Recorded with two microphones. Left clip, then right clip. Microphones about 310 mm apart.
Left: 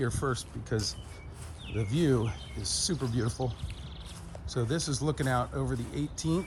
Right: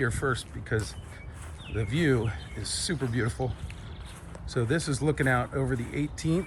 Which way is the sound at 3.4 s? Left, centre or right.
Left.